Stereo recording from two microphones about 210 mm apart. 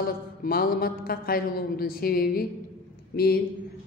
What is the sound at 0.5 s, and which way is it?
A woman's voice, 45° left (ahead or behind).